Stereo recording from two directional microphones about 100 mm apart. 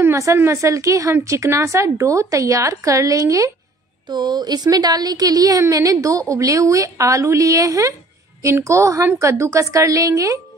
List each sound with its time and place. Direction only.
0.0 s a woman's voice: 30° right (ahead or behind)
4.1 s a woman's voice: 45° right (ahead or behind)